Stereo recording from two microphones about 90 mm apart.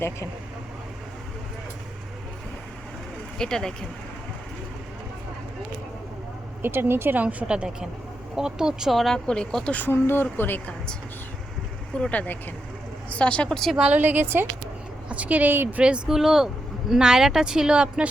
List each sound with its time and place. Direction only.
3.3 s a woman's voice: 5° left (ahead or behind)
6.6 s a woman's voice: 25° right (ahead or behind); by 9.7 s 5° left (ahead or behind)
9.7 s speech: 25° left (ahead or behind)
11.9 s a woman's voice: 15° left (ahead or behind)
13.7 s a woman's voice: 15° right (ahead or behind)
15.8 s speech: 10° right (ahead or behind)